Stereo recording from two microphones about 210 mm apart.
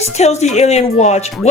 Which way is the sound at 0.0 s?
30° left (ahead or behind).